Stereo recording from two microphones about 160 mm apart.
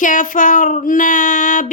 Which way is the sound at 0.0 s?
55° left (ahead or behind).